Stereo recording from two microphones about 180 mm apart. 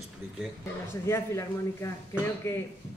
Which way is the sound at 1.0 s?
15° left (ahead or behind).